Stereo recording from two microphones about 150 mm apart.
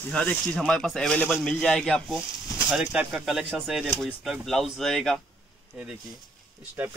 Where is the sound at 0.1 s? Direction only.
5° left (ahead or behind).